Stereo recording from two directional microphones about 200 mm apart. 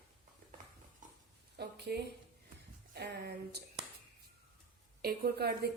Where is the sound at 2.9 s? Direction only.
55° right (ahead or behind).